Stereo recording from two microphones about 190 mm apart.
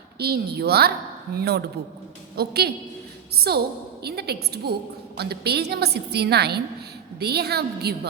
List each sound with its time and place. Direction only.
0.2 s a woman's voice: 55° right (ahead or behind)